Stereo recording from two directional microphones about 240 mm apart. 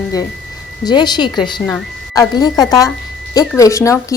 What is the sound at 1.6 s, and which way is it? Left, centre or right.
Speech, centre.